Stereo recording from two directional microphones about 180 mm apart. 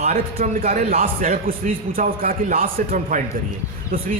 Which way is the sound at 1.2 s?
50° right (ahead or behind).